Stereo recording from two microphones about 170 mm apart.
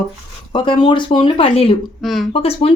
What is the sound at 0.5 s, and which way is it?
Speech, 30° left (ahead or behind).